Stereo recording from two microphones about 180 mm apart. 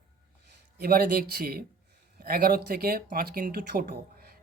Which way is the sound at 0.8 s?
55° right (ahead or behind).